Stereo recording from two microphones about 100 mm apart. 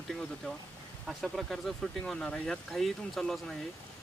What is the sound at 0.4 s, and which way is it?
Speech, 10° left (ahead or behind).